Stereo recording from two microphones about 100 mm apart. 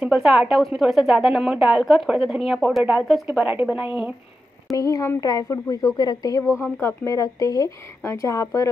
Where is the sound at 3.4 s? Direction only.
10° right (ahead or behind).